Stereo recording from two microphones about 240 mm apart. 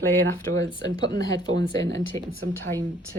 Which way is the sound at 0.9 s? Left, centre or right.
Right.